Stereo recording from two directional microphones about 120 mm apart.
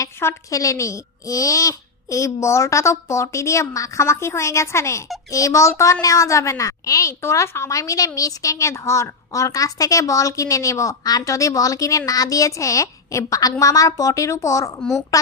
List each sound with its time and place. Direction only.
0.0 s a child's voice: 25° left (ahead or behind)